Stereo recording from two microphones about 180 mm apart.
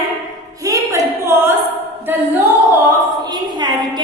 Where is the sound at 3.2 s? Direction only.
25° right (ahead or behind).